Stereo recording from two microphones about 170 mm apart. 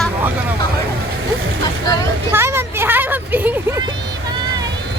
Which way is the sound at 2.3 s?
15° right (ahead or behind).